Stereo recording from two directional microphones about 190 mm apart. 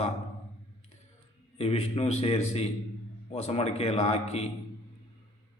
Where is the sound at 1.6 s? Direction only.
30° left (ahead or behind).